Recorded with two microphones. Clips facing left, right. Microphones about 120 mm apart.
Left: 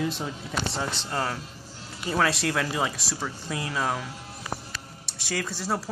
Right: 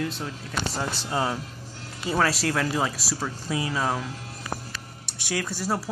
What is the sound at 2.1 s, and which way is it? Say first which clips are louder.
Speech: right 1 dB; 5° right (ahead or behind).